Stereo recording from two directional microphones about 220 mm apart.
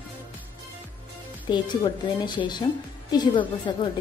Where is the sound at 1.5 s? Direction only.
20° left (ahead or behind).